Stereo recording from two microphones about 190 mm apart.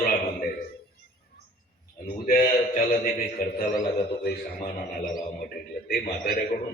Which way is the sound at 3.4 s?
50° left (ahead or behind).